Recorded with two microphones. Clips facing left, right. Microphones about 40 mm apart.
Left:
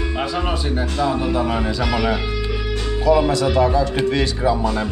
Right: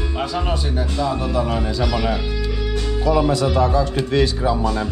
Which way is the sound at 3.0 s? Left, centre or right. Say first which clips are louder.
Left 3 dB; centre.